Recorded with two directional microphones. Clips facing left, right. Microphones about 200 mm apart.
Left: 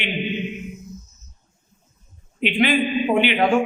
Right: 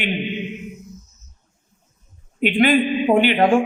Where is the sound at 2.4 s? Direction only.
50° right (ahead or behind).